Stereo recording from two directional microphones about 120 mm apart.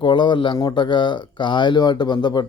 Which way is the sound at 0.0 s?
40° left (ahead or behind).